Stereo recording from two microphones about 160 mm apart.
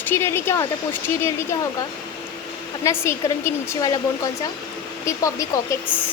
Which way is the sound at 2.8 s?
15° left (ahead or behind).